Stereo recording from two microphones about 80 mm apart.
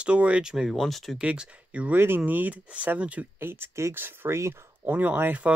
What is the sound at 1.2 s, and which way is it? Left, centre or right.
Speech, centre.